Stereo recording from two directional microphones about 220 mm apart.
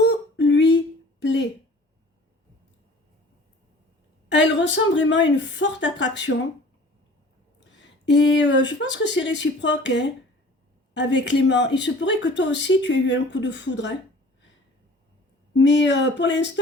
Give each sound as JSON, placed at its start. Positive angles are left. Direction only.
{"t": 0.4, "sound": "a sound", "side_deg": 55}
{"t": 4.3, "sound": "speech", "side_deg": 55}
{"t": 7.8, "sound": "speech", "side_deg": 55}
{"t": 15.5, "sound": "speech", "side_deg": 55}